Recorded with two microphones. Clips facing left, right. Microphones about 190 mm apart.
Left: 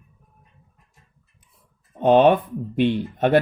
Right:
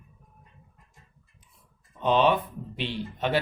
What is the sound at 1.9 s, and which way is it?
Speech, 50° left (ahead or behind).